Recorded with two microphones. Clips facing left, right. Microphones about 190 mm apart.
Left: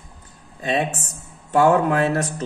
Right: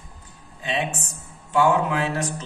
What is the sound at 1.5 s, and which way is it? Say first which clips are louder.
Speech: left 4 dB; 40° left (ahead or behind).